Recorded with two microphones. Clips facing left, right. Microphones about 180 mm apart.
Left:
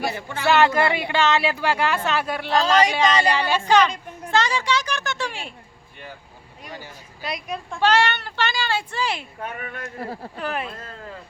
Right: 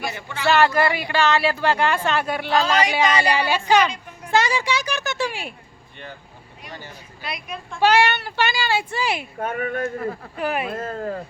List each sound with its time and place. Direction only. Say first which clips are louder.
0.0 s a woman's voice: left 3 dB; 35° left (ahead or behind)
0.4 s a child's voice: even; 20° left (ahead or behind); by 5.5 s 5° right (ahead or behind)
7.2 s a woman's voice: left 3 dB; 40° left (ahead or behind)
7.8 s a child's voice: right 2 dB; 10° right (ahead or behind)
9.4 s speech: right 8 dB; 45° right (ahead or behind)
10.0 s a woman's voice: right 3 dB; 30° left (ahead or behind)
10.3 s a child's voice: right 3 dB; 10° right (ahead or behind)
10.8 s speech: right 10 dB; 45° right (ahead or behind)